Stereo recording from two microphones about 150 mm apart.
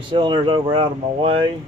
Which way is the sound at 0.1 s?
35° right (ahead or behind).